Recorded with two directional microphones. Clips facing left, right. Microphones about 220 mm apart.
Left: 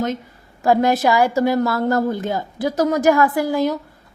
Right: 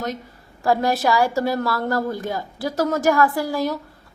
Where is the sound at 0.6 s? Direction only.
20° left (ahead or behind).